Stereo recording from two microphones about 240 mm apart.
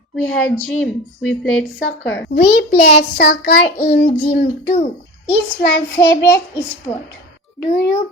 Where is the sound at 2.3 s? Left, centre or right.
Left.